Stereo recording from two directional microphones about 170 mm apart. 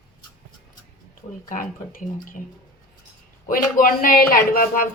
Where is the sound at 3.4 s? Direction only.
55° left (ahead or behind).